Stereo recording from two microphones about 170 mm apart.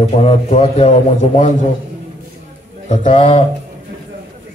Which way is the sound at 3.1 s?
30° left (ahead or behind).